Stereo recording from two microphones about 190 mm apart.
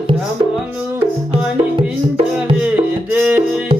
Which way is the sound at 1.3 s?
30° right (ahead or behind).